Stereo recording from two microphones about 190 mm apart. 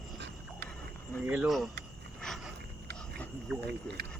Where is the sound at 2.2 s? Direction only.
Centre (ahead or behind).